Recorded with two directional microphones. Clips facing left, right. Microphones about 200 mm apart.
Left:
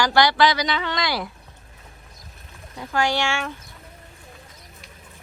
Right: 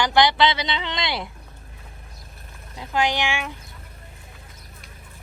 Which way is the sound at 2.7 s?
20° right (ahead or behind).